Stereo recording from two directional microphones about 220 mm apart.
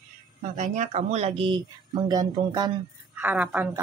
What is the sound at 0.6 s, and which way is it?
A woman's voice, 30° right (ahead or behind).